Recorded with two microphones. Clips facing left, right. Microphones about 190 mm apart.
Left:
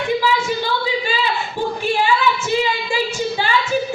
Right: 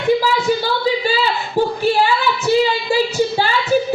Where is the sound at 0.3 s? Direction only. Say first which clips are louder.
Right 3 dB; 40° right (ahead or behind).